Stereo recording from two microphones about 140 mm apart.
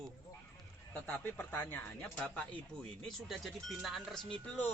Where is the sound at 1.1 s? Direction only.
15° left (ahead or behind).